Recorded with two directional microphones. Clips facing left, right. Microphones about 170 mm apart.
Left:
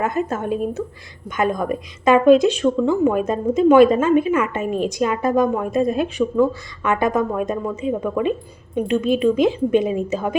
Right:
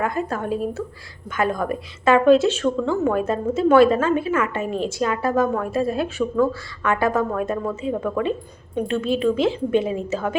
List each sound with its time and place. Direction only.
0.0 s a woman's voice: 20° left (ahead or behind)